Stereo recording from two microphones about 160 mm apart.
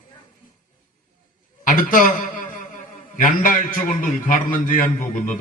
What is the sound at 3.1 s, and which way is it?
A man's voice, 60° left (ahead or behind).